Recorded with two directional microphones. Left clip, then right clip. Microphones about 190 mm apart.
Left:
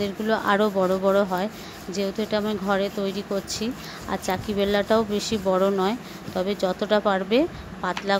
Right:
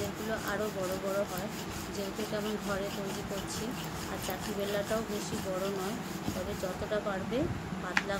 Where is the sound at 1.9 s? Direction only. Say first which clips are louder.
Left 12 dB; 45° left (ahead or behind).